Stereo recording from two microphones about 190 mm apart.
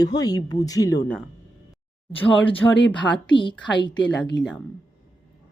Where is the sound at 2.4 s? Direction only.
75° left (ahead or behind).